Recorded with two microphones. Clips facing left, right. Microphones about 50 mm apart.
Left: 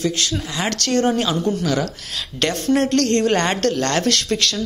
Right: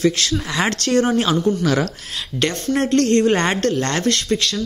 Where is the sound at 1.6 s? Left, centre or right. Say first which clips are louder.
Right 2 dB; right.